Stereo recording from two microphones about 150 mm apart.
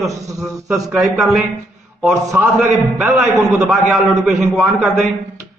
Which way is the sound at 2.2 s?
15° right (ahead or behind).